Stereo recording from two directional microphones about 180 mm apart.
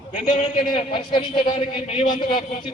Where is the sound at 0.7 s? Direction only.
30° left (ahead or behind).